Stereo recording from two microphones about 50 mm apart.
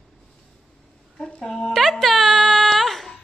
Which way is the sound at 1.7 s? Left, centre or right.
Centre.